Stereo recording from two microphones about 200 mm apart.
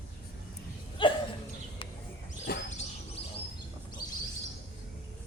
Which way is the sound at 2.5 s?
55° left (ahead or behind).